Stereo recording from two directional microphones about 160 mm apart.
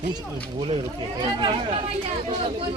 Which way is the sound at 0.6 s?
35° right (ahead or behind).